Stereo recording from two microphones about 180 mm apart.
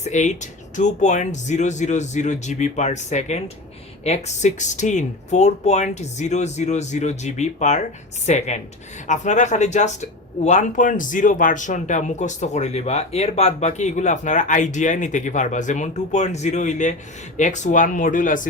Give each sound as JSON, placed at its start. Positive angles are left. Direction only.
{"t": 0.0, "sound": "speech", "side_deg": 40}